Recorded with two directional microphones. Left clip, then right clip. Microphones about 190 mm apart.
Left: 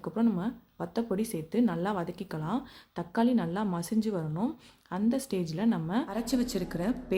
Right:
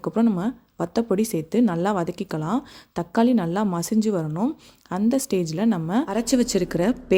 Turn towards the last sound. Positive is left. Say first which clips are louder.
# right 11 dB
turn(degrees=-40)  # may be behind; listen again after turning